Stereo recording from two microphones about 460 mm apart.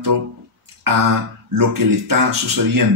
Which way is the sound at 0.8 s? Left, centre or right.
Right.